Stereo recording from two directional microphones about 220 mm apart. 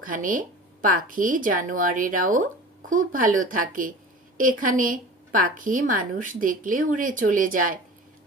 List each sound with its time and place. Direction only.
0.0 s a woman's voice: 40° right (ahead or behind)